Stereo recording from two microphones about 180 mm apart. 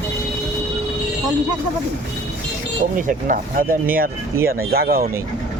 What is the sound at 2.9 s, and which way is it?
Speech, 45° right (ahead or behind).